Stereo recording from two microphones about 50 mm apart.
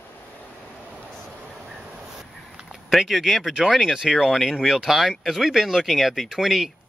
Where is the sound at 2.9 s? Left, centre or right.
Centre.